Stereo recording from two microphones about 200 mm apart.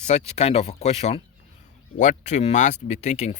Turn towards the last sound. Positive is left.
turn(degrees=35)  # may be behind; listen again after turning